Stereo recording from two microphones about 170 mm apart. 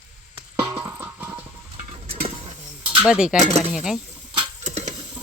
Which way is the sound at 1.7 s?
40° right (ahead or behind).